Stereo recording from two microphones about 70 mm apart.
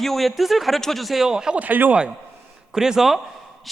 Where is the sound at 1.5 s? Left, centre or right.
Right.